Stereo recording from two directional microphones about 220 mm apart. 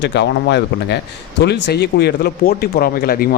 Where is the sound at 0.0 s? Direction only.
50° left (ahead or behind).